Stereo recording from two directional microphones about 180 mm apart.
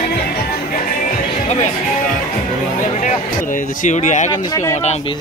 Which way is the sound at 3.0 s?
45° left (ahead or behind).